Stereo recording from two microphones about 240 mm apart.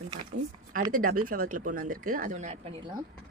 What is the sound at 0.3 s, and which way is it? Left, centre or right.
Speech, right.